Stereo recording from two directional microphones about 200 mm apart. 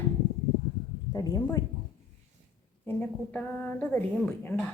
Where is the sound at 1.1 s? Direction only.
15° left (ahead or behind).